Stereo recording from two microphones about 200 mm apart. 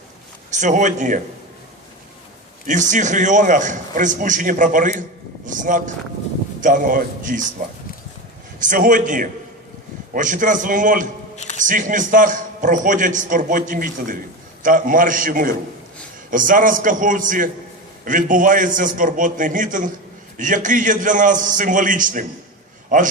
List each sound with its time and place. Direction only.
0.5 s a man's voice: 40° right (ahead or behind)
2.6 s a man's voice: 40° right (ahead or behind)
8.5 s a man's voice: 40° right (ahead or behind)